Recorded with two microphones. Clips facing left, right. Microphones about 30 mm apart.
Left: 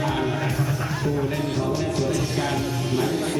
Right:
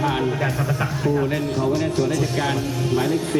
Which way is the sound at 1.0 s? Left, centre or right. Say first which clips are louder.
Right 5 dB; right.